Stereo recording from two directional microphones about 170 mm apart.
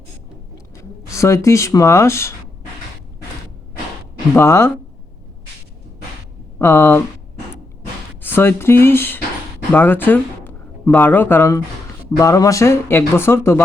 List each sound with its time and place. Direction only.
0.8 s speech: 15° left (ahead or behind)
4.4 s speech: 15° left (ahead or behind)
6.6 s speech: 15° left (ahead or behind)
8.2 s speech: 10° left (ahead or behind)